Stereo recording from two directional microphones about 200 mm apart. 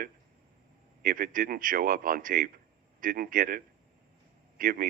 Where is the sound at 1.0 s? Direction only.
45° right (ahead or behind).